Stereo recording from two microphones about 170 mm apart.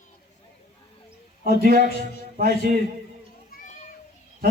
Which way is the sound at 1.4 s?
60° right (ahead or behind).